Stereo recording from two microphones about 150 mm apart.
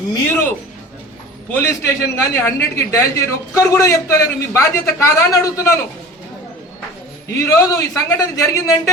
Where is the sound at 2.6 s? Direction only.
20° left (ahead or behind).